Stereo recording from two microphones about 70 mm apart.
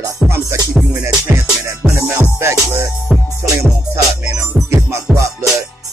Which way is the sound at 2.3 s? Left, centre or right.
Right.